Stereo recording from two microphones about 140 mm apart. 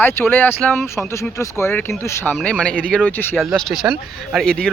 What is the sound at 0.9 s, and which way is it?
Speech, 20° left (ahead or behind).